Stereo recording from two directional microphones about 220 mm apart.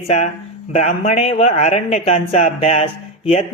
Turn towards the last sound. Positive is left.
turn(degrees=25)  # may be behind; listen again after turning